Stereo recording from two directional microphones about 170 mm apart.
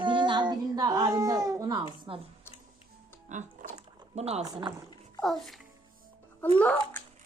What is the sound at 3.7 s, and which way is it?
Dog, 40° right (ahead or behind).